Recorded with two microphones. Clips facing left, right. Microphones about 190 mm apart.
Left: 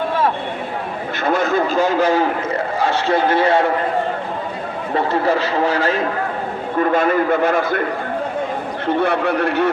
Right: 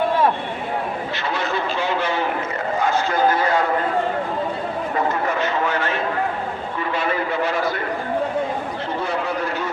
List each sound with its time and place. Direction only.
1.2 s vehicle: 50° left (ahead or behind)
2.8 s a man's voice: 30° left (ahead or behind)
4.9 s speech: 35° left (ahead or behind)
6.7 s a man's voice: 50° left (ahead or behind)
9.0 s speech: 65° left (ahead or behind)